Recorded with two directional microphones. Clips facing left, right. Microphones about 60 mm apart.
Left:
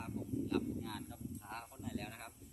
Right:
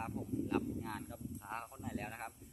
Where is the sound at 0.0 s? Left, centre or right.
Right.